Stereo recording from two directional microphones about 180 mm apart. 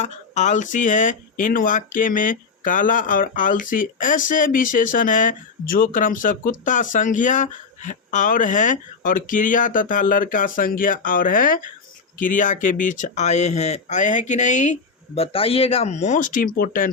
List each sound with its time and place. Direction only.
0.0 s speech: 40° left (ahead or behind)